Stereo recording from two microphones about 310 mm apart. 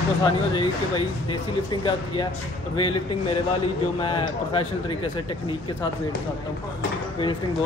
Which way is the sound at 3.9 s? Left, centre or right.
Centre.